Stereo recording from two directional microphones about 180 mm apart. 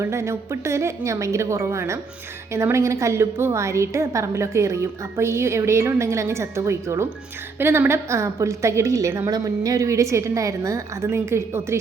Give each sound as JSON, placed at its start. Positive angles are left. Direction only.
{"t": 0.0, "sound": "a woman's voice", "side_deg": -15}